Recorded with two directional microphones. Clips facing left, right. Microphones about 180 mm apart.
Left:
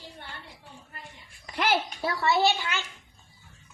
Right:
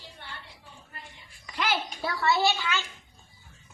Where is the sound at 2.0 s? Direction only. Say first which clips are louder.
Even; 25° left (ahead or behind).